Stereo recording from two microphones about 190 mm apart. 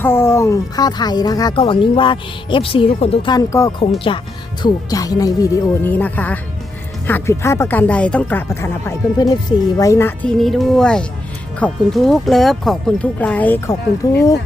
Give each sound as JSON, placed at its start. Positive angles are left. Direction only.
{"t": 0.0, "sound": "speech", "side_deg": 10}
{"t": 3.3, "sound": "speech", "side_deg": 20}